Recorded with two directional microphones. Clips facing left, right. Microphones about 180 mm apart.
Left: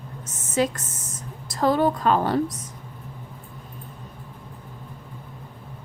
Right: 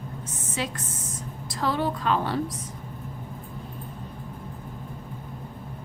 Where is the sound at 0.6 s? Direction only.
45° left (ahead or behind).